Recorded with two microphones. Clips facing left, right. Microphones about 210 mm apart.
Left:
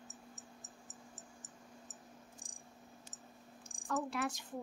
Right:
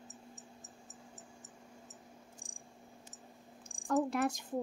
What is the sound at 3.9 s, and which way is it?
Speech, 40° right (ahead or behind).